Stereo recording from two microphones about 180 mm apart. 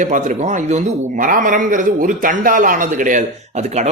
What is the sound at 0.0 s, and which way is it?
A man's voice, 45° right (ahead or behind).